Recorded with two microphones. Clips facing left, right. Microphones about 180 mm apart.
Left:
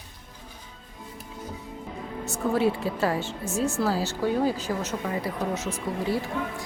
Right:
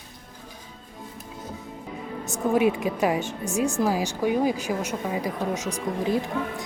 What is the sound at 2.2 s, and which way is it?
Speech, 15° right (ahead or behind).